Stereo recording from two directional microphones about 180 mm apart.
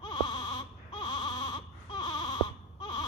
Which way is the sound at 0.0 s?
25° left (ahead or behind).